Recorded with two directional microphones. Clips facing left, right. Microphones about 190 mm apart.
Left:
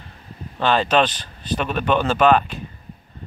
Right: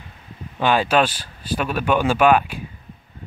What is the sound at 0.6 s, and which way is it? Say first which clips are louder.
Speech: even; 10° right (ahead or behind).